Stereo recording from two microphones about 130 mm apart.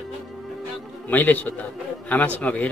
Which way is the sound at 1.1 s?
15° left (ahead or behind).